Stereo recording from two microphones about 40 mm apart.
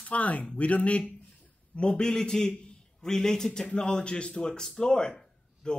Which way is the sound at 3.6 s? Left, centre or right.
Left.